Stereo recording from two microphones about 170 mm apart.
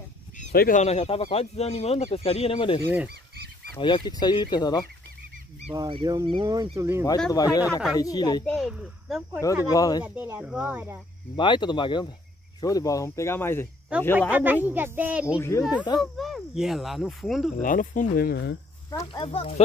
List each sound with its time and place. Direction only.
0.5 s speech: 65° left (ahead or behind)
0.7 s speech: 40° left (ahead or behind)
3.8 s speech: 25° left (ahead or behind)
5.7 s speech: 30° right (ahead or behind)
7.2 s speech: 20° left (ahead or behind)
8.5 s speech: centre (ahead or behind)
9.7 s speech: 20° left (ahead or behind)
10.0 s speech: 10° right (ahead or behind)
11.3 s speech: 25° left (ahead or behind)
13.9 s speech: 5° right (ahead or behind)
17.6 s speech: 50° left (ahead or behind); by 18.6 s 75° left (ahead or behind)
18.9 s speech: 20° left (ahead or behind)
19.2 s speech: 35° left (ahead or behind)